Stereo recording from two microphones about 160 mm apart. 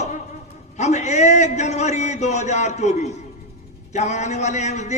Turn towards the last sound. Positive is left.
turn(degrees=45)  # may be behind; listen again after turning